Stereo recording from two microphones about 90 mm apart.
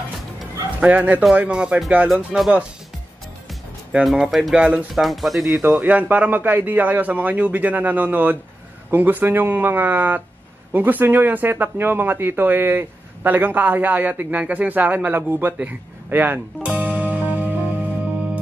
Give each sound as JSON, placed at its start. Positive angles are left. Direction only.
{"t": 0.7, "sound": "speech", "side_deg": -20}
{"t": 3.9, "sound": "speech", "side_deg": -10}
{"t": 4.9, "sound": "speech", "side_deg": 0}
{"t": 5.6, "sound": "a man's voice", "side_deg": -20}